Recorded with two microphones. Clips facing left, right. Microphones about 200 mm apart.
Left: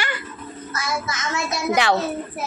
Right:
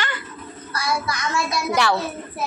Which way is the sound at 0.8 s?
20° left (ahead or behind).